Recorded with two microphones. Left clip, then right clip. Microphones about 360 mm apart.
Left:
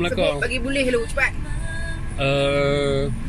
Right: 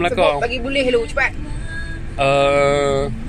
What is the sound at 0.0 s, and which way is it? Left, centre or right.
Mantra, centre.